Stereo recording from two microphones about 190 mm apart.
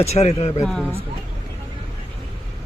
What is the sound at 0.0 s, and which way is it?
Speech, 35° left (ahead or behind).